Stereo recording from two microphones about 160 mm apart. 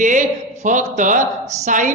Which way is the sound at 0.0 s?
50° right (ahead or behind).